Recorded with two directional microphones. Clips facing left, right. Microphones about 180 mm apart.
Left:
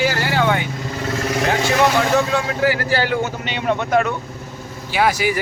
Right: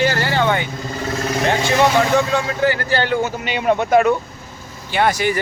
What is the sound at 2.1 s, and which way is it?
Speech, 5° left (ahead or behind).